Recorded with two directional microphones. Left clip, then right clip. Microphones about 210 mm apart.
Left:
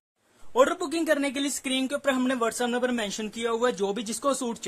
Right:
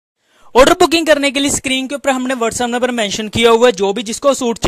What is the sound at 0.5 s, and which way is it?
Speech, 40° right (ahead or behind).